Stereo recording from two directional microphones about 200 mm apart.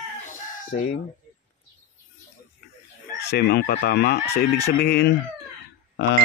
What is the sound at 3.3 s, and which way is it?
Speech, 55° left (ahead or behind).